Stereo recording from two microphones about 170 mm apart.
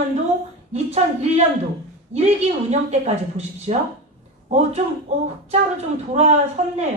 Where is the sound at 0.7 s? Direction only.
40° right (ahead or behind).